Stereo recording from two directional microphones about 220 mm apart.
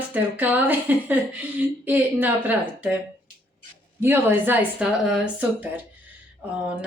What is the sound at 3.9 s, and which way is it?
A woman's voice, 10° right (ahead or behind).